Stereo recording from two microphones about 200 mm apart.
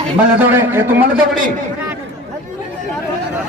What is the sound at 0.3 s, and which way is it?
Speech, 10° right (ahead or behind).